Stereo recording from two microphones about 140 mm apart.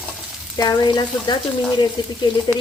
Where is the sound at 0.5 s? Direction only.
30° left (ahead or behind).